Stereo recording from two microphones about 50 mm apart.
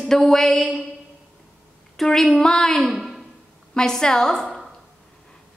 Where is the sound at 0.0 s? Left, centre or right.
Centre.